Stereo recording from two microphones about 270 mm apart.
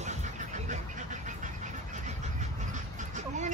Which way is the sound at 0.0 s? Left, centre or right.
Right.